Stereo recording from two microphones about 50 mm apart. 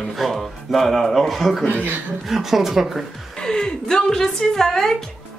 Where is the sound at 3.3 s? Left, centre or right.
Centre.